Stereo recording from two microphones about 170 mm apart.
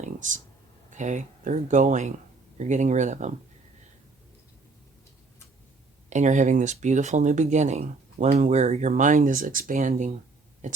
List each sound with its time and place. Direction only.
0.0 s a sound: 45° right (ahead or behind)
0.9 s speech: 45° right (ahead or behind)
6.1 s speech: 45° right (ahead or behind)